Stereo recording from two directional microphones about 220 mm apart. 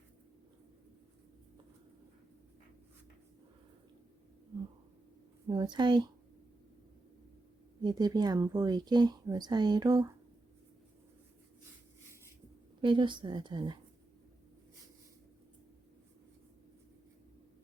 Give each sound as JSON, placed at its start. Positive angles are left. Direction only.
{"t": 5.5, "sound": "a woman's voice", "side_deg": -20}
{"t": 7.8, "sound": "speech", "side_deg": -20}
{"t": 12.8, "sound": "a woman's voice", "side_deg": -20}